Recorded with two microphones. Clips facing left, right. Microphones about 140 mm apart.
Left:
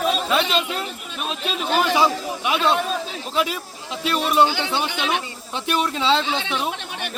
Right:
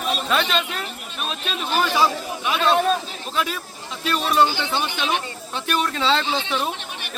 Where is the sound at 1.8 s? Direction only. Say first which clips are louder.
Left 1 dB; 20° left (ahead or behind).